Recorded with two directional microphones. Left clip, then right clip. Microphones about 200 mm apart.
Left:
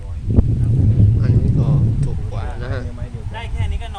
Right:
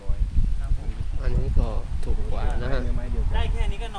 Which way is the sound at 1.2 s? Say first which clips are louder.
Left 4 dB; 10° left (ahead or behind).